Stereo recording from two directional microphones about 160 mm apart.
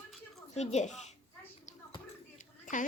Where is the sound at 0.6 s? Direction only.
45° left (ahead or behind).